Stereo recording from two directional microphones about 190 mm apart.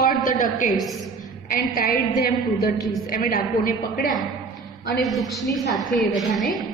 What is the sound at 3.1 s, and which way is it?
A woman's voice, 45° left (ahead or behind).